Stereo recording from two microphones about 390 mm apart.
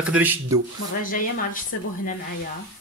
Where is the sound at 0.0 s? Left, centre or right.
Centre.